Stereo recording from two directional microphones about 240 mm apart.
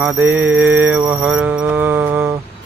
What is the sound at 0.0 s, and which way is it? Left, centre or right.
Mantra, centre.